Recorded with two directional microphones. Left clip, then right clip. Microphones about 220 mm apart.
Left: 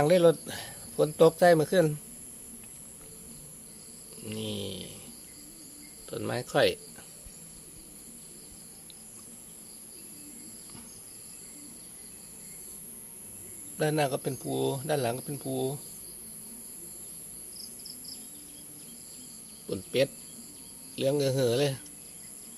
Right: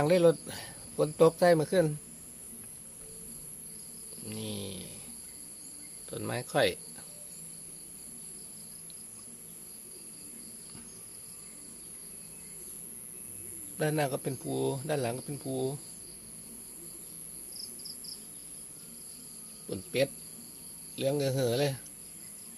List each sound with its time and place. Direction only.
0.0 s speech: 5° left (ahead or behind)
4.3 s speech: 5° left (ahead or behind)
6.1 s speech: 5° left (ahead or behind)
13.7 s speech: centre (ahead or behind)
19.6 s speech: 5° left (ahead or behind)